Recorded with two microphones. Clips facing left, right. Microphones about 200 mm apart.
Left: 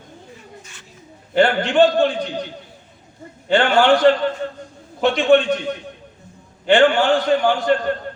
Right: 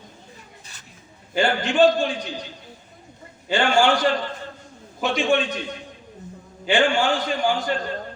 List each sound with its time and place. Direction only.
1.3 s a man's voice: 60° left (ahead or behind)
3.5 s a man's voice: 60° left (ahead or behind)
5.1 s a man's voice: 60° left (ahead or behind)